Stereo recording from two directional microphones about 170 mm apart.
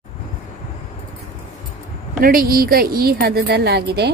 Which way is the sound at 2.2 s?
60° right (ahead or behind).